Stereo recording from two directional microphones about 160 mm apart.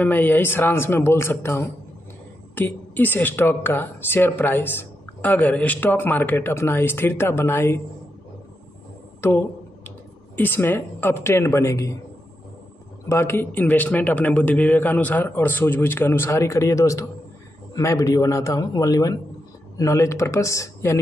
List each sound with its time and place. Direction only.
0.0 s a woman's voice: 10° left (ahead or behind)
9.8 s speech: 10° left (ahead or behind)
13.1 s a woman's voice: 15° left (ahead or behind)